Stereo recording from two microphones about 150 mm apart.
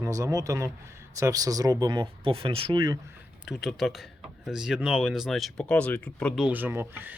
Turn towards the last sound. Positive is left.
turn(degrees=-15)  # may be behind; listen again after turning